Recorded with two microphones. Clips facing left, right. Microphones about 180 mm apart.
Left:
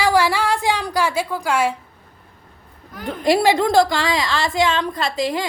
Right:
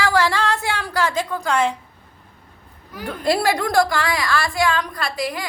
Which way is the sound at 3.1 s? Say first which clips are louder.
Left 3 dB; 20° left (ahead or behind).